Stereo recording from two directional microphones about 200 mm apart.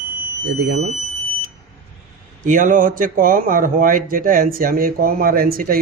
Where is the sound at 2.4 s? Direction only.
40° right (ahead or behind).